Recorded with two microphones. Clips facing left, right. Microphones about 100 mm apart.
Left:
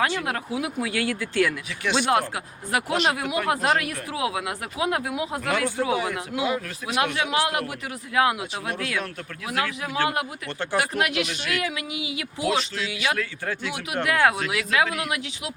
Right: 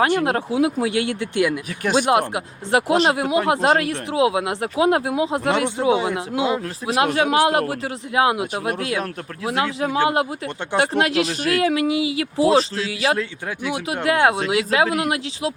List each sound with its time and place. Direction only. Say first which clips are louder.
0.3 s speech: right 8 dB; 30° right (ahead or behind)
1.8 s speech: right 5 dB; 45° right (ahead or behind)
2.0 s speech: right 4 dB; 20° right (ahead or behind); by 7.6 s 35° right (ahead or behind)
7.7 s speech: right 6 dB; 25° right (ahead or behind)
13.7 s speech: right 6 dB; 20° right (ahead or behind)